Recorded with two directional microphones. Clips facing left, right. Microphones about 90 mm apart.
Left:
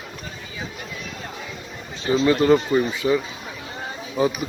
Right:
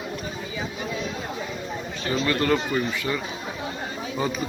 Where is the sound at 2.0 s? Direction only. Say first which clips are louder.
Left 7 dB; 25° left (ahead or behind).